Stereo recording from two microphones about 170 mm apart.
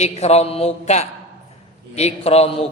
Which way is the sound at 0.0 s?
40° left (ahead or behind).